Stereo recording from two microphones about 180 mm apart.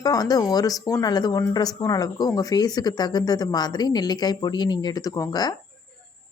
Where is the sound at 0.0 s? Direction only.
20° left (ahead or behind).